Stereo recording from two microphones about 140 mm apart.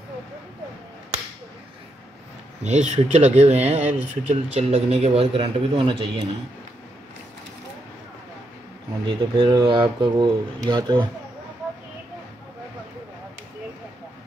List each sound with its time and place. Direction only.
2.6 s speech: 55° right (ahead or behind); by 6.2 s 35° right (ahead or behind)
9.0 s speech: 35° right (ahead or behind)